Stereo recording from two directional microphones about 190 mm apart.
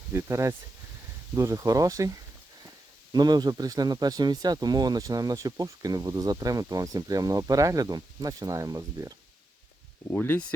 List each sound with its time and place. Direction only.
0.1 s speech: 15° right (ahead or behind)
10.1 s speech: 10° left (ahead or behind)